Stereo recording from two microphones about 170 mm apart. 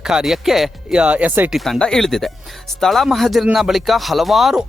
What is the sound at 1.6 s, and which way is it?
Speech, 5° left (ahead or behind).